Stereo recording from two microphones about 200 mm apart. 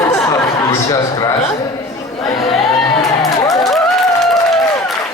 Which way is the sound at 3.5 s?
Centre (ahead or behind).